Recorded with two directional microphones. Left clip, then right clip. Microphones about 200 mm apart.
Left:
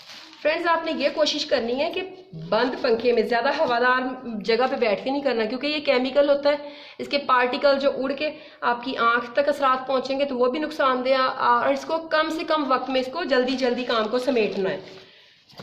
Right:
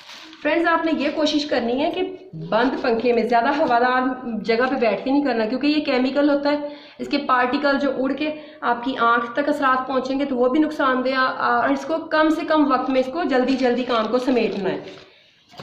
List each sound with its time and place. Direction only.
0.4 s a woman's voice: 40° left (ahead or behind)